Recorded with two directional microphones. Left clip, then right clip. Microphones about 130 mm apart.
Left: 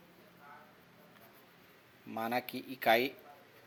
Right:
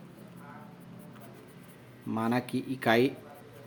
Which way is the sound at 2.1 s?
30° left (ahead or behind).